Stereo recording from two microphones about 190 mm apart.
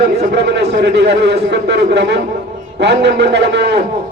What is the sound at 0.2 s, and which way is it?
A man's voice, 60° right (ahead or behind).